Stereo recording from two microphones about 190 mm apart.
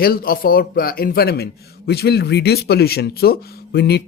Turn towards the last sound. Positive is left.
turn(degrees=55)  # may be behind; listen again after turning